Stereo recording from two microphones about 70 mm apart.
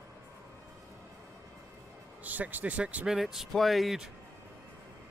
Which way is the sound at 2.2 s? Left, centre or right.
Right.